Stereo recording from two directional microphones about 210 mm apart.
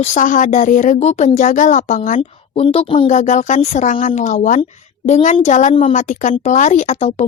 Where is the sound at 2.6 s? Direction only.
25° left (ahead or behind).